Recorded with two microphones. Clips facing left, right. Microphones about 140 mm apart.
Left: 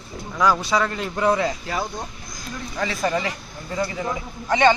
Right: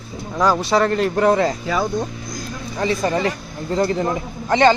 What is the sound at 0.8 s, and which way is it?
Speech, 55° right (ahead or behind).